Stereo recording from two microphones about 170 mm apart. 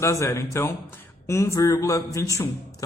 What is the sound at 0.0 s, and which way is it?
A man's voice, 15° left (ahead or behind).